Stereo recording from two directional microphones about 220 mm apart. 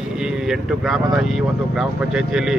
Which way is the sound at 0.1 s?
Centre (ahead or behind).